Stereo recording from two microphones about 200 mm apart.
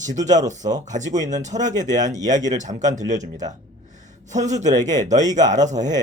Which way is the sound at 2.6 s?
40° right (ahead or behind).